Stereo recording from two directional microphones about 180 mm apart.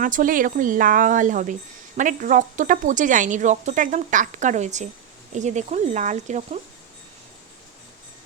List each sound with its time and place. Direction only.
0.0 s speech: 45° right (ahead or behind)